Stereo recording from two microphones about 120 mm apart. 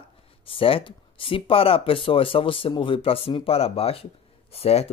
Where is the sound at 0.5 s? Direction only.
50° left (ahead or behind).